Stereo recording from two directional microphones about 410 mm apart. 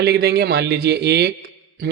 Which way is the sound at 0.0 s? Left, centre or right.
Right.